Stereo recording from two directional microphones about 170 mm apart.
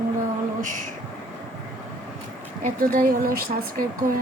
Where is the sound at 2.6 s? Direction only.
55° right (ahead or behind).